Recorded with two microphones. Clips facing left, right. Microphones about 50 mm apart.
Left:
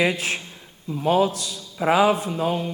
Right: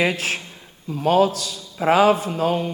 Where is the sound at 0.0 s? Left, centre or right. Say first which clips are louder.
Right 1 dB; centre.